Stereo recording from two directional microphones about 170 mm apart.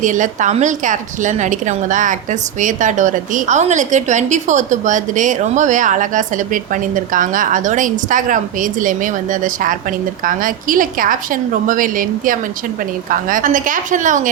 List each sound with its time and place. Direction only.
0.0 s a woman's voice: 50° right (ahead or behind)